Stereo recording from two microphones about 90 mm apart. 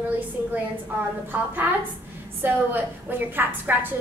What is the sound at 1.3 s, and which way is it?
A woman's voice, 20° right (ahead or behind).